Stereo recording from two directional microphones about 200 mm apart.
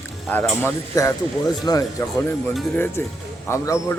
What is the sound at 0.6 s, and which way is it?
Speech, 15° left (ahead or behind).